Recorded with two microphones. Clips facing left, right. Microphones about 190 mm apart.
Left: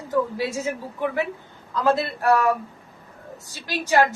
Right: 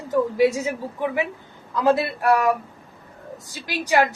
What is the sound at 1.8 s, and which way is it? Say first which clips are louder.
A woman's voice: right 1 dB; 15° right (ahead or behind).